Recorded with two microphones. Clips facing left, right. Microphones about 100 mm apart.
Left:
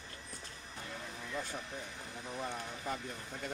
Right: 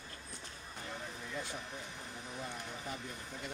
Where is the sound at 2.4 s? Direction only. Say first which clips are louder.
Left 5 dB; 45° left (ahead or behind).